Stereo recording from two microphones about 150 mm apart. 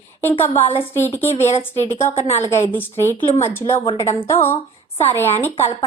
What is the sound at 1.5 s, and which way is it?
Speech, 50° left (ahead or behind).